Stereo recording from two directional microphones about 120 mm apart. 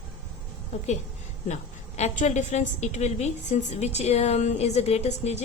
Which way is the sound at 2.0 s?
70° left (ahead or behind).